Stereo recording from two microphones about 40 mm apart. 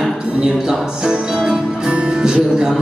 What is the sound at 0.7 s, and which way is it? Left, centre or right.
Music, centre.